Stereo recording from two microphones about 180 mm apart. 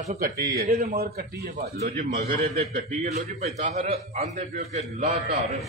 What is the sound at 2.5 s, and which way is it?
A man's voice, 35° right (ahead or behind).